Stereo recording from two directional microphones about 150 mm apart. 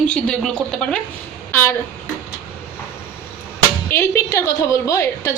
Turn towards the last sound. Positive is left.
turn(degrees=20)  # may be behind; listen again after turning